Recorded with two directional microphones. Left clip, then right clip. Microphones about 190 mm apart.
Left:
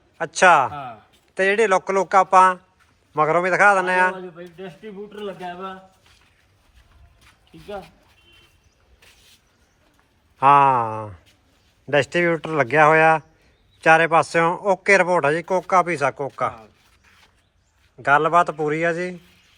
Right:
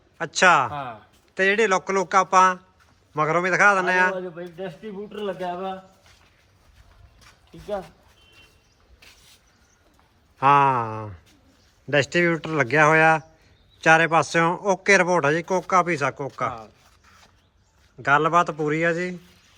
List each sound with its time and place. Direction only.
0.2 s speech: 5° right (ahead or behind)
4.4 s a man's voice: 50° right (ahead or behind)
10.4 s speech: centre (ahead or behind)
18.0 s speech: 5° right (ahead or behind)